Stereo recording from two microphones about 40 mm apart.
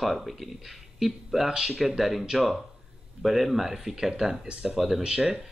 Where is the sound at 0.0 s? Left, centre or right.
Centre.